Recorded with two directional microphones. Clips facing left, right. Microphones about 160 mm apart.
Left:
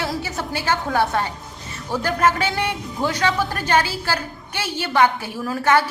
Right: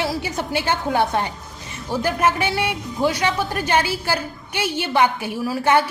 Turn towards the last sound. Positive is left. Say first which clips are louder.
# right 1 dB
turn(degrees=-15)  # may be behind; listen again after turning